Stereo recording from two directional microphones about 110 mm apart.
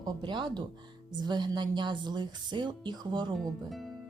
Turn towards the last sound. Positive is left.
turn(degrees=-40)  # may be behind; listen again after turning